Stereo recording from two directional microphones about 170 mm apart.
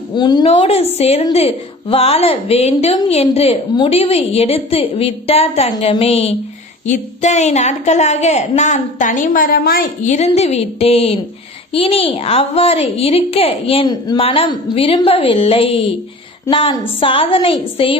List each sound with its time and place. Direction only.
0.1 s speech: 25° left (ahead or behind)
0.4 s a woman's voice: 40° left (ahead or behind)